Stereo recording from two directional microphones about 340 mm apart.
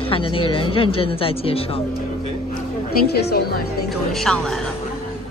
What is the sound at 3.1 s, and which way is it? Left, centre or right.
Speech, left.